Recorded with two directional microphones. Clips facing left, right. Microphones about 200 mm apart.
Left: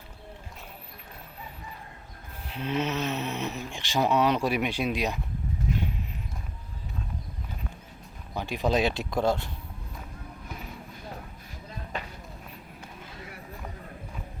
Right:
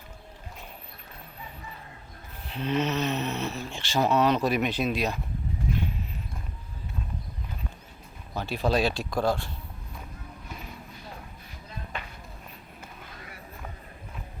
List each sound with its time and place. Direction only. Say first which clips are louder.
2.5 s speech: right 2 dB; 10° left (ahead or behind)
8.4 s speech: even; 15° left (ahead or behind)